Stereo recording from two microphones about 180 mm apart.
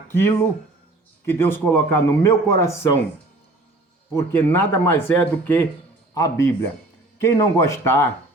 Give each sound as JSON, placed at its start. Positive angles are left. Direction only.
{"t": 0.1, "sound": "speech", "side_deg": 10}
{"t": 4.1, "sound": "speech", "side_deg": 10}